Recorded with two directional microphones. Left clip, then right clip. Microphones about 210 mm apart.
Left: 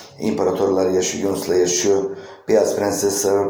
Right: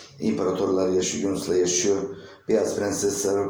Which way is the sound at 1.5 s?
5° left (ahead or behind).